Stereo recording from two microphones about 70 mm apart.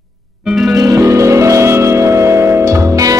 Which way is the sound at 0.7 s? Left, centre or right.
Right.